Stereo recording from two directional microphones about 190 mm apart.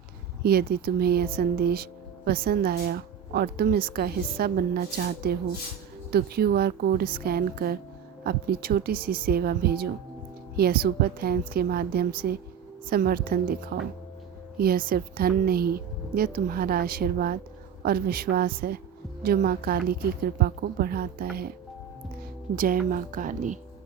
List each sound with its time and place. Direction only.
0.4 s a woman's voice: 55° right (ahead or behind)
22.5 s a woman's voice: 45° right (ahead or behind)